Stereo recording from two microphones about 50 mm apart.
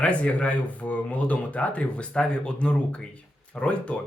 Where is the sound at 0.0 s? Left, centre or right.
Left.